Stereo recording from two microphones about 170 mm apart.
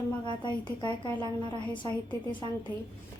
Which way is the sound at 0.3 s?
25° left (ahead or behind).